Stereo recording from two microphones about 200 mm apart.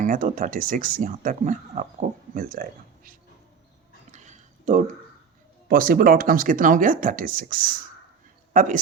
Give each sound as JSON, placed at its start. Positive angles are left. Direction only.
{"t": 0.0, "sound": "speech", "side_deg": -40}
{"t": 4.1, "sound": "a sound", "side_deg": -35}
{"t": 5.6, "sound": "speech", "side_deg": -45}